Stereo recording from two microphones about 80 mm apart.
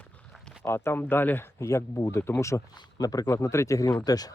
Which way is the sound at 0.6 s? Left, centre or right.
Left.